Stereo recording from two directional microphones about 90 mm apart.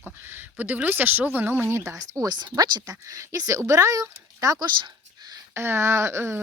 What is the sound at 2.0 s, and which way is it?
Speech, 45° right (ahead or behind).